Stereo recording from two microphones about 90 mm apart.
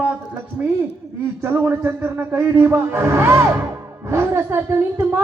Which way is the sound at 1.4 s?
25° right (ahead or behind).